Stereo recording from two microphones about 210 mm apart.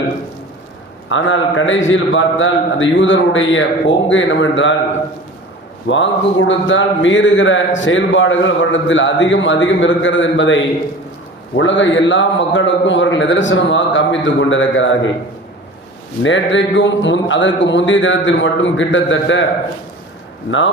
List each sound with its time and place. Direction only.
1.1 s a man's voice: 65° left (ahead or behind)
5.9 s a man's voice: 60° left (ahead or behind)
16.2 s a man's voice: 60° left (ahead or behind)